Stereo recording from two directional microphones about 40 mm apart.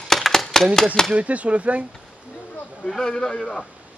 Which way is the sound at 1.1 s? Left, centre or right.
Right.